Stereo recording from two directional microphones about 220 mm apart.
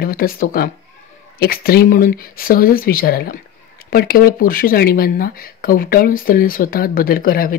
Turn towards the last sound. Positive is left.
turn(degrees=40)  # may be behind; listen again after turning